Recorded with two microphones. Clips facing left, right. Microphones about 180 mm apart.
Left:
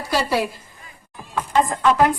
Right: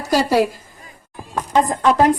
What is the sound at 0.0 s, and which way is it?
A woman's voice, 40° right (ahead or behind).